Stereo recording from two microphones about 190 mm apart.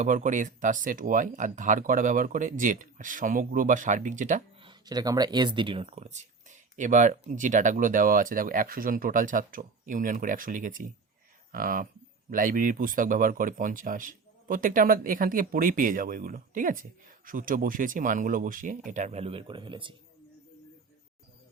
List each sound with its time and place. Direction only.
0.0 s speech: 40° right (ahead or behind)
4.6 s speech: 25° right (ahead or behind)